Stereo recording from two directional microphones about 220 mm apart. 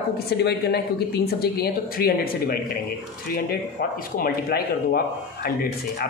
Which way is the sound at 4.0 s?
40° left (ahead or behind).